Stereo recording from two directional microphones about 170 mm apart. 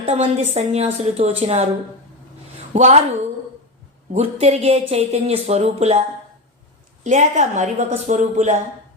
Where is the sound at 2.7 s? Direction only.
45° right (ahead or behind).